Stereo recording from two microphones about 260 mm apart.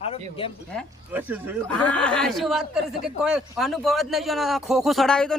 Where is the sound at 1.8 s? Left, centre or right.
Centre.